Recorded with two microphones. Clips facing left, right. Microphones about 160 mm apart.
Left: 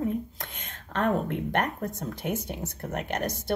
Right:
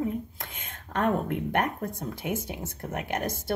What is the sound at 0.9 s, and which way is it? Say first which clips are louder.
Speech: even; 10° right (ahead or behind).